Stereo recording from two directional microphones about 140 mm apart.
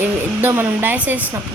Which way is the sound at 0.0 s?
15° right (ahead or behind).